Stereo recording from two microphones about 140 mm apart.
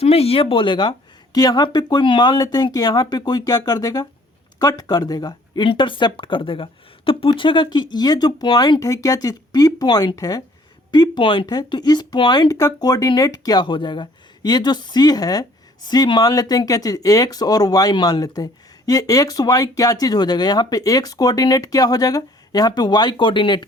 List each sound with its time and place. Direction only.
0.0 s speech: 45° left (ahead or behind)